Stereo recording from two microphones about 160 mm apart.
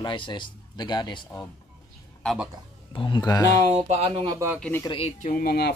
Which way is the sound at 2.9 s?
30° left (ahead or behind).